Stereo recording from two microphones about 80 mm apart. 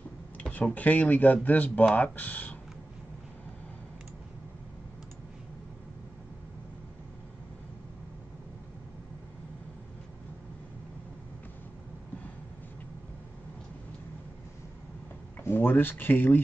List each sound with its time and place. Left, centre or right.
0.4 s speech: centre
15.4 s speech: left